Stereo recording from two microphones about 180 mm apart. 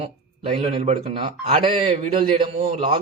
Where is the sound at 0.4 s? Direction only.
35° right (ahead or behind).